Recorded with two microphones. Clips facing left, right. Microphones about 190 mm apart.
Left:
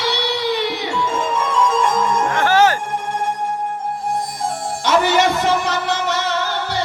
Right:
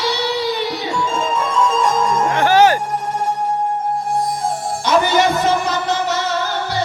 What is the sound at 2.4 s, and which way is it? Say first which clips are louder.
Music: right 2 dB; 15° right (ahead or behind).